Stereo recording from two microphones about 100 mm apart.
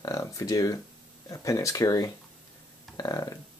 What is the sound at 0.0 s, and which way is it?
Speech, 35° left (ahead or behind).